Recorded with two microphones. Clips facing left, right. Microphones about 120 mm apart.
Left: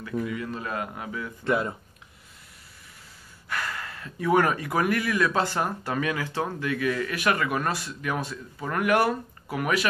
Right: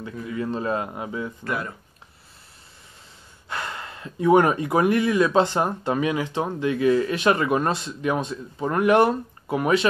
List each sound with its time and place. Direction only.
0.3 s speech: 30° right (ahead or behind)
1.4 s speech: 25° left (ahead or behind)
3.4 s speech: 25° right (ahead or behind)